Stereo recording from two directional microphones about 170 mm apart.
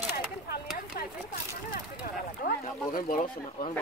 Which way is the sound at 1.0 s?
65° left (ahead or behind).